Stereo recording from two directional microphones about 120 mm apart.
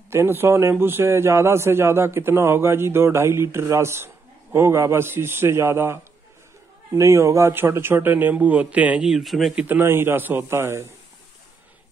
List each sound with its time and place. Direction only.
0.1 s a man's voice: 20° right (ahead or behind); by 9.7 s centre (ahead or behind)
9.7 s a man's voice: 20° right (ahead or behind)